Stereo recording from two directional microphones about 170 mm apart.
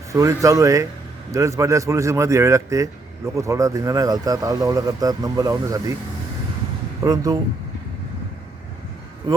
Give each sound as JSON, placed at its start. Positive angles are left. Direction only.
{"t": 0.1, "sound": "speech", "side_deg": -20}
{"t": 7.0, "sound": "speech", "side_deg": -20}
{"t": 9.2, "sound": "speech", "side_deg": -25}